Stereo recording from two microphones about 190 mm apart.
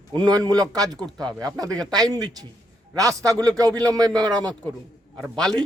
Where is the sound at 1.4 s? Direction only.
20° right (ahead or behind).